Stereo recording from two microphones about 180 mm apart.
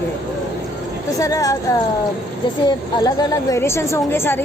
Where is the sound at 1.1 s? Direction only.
20° left (ahead or behind).